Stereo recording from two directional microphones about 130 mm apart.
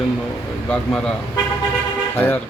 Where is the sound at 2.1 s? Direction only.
15° left (ahead or behind).